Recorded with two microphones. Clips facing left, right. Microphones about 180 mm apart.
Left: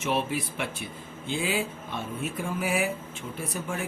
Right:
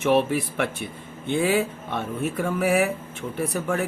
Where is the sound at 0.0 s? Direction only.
60° right (ahead or behind).